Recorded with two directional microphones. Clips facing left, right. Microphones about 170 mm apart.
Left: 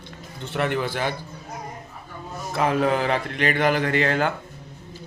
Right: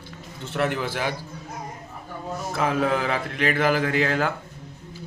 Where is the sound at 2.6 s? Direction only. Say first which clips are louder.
Left 2 dB; centre (ahead or behind).